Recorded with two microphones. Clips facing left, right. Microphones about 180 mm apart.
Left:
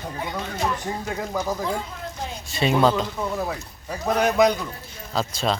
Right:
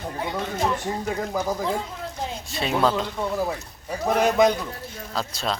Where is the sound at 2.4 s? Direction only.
Centre (ahead or behind).